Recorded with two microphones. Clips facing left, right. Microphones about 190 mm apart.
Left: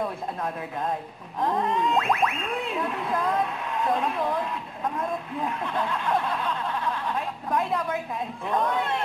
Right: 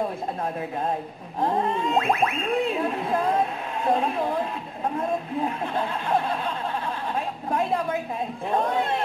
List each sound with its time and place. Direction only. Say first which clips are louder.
1.4 s a man's voice: right 1 dB; 30° right (ahead or behind)